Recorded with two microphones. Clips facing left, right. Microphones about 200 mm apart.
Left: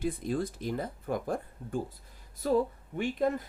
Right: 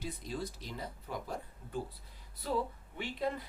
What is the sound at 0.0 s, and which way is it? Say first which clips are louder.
Speech: left 9 dB; 50° left (ahead or behind).